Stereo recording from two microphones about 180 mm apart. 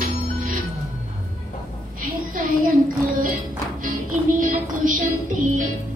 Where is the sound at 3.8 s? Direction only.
50° right (ahead or behind).